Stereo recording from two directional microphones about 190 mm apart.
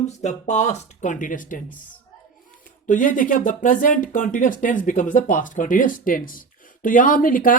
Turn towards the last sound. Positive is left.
turn(degrees=45)  # may be behind; listen again after turning